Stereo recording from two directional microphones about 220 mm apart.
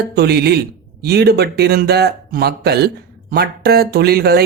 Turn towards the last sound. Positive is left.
turn(degrees=-45)  # may be behind; listen again after turning